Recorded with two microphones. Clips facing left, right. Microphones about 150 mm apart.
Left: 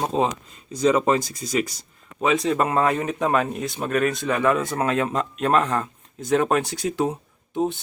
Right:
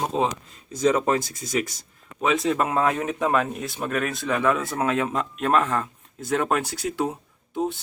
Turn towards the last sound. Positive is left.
turn(degrees=0)  # may be behind; listen again after turning